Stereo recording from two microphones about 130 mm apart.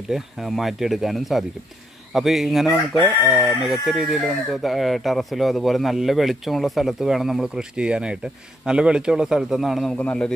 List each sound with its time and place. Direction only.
0.1 s speech: centre (ahead or behind)